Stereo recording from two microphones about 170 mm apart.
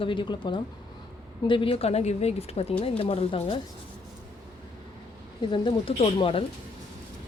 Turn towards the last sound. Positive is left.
turn(degrees=35)  # may be behind; listen again after turning